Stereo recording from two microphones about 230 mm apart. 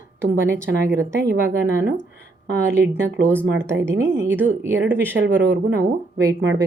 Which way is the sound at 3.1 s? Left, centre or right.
Right.